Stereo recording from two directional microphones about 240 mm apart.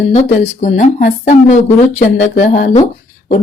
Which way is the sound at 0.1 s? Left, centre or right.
Left.